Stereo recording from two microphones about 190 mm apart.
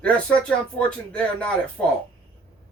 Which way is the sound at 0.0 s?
5° left (ahead or behind).